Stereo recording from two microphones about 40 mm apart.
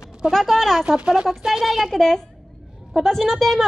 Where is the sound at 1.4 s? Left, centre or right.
Centre.